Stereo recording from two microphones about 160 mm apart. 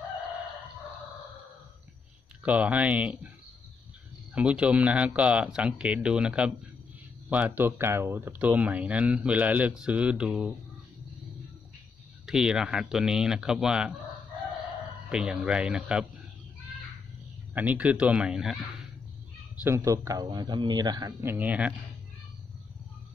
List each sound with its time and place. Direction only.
2.4 s speech: 10° right (ahead or behind)
4.4 s speech: 5° right (ahead or behind)
12.3 s speech: 5° right (ahead or behind)
15.0 s speech: 5° right (ahead or behind)
17.6 s speech: 10° right (ahead or behind)
19.6 s speech: 20° right (ahead or behind)